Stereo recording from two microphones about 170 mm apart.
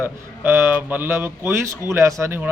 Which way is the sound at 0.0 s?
10° right (ahead or behind).